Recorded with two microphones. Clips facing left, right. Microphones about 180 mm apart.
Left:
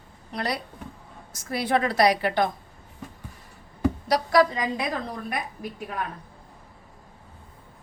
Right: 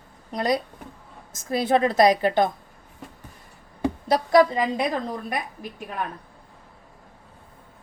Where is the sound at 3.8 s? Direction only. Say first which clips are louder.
Right 1 dB; 25° right (ahead or behind).